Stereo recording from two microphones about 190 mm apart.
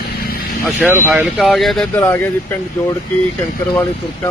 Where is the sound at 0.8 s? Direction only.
10° right (ahead or behind).